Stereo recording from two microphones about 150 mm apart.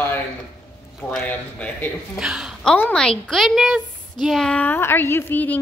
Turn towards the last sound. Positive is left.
turn(degrees=10)  # may be behind; listen again after turning